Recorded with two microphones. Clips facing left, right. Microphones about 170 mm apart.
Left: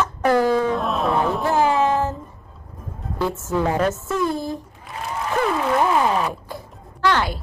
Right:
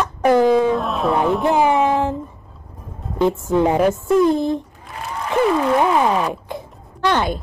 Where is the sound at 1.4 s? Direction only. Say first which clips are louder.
Right 2 dB; 15° right (ahead or behind).